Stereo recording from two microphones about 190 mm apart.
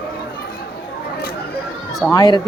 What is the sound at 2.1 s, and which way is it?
Speech, 20° left (ahead or behind).